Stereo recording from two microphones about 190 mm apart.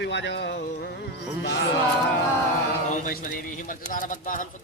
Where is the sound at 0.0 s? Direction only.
65° left (ahead or behind).